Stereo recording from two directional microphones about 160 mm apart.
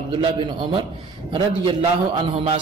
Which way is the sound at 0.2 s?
30° right (ahead or behind).